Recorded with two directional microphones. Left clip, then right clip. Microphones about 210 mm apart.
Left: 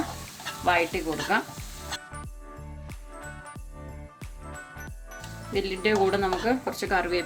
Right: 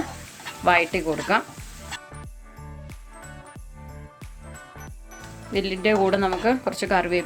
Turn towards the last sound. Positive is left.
turn(degrees=-40)  # may be behind; listen again after turning